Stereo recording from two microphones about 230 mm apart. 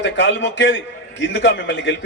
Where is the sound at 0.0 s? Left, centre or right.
Left.